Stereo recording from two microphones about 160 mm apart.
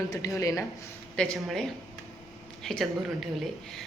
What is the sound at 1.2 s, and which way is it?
Speech, 5° left (ahead or behind).